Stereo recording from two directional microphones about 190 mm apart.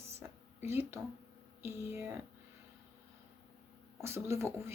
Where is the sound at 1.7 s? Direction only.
10° right (ahead or behind).